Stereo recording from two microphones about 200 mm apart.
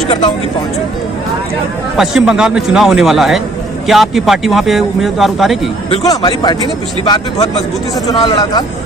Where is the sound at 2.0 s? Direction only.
Centre (ahead or behind).